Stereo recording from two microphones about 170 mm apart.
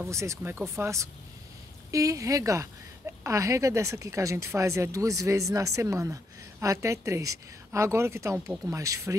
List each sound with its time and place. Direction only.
0.0 s speech: 15° right (ahead or behind)